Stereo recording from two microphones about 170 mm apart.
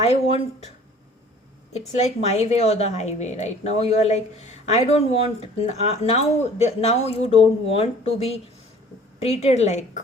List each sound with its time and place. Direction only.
0.0 s a woman's voice: 35° left (ahead or behind)
2.0 s a woman's voice: 40° left (ahead or behind)